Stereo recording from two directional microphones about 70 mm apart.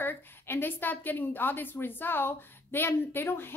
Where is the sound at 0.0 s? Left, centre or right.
Left.